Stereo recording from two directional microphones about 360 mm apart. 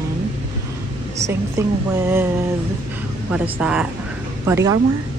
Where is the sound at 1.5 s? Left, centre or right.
Centre.